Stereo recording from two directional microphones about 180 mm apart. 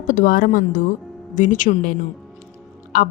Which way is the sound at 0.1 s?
50° left (ahead or behind).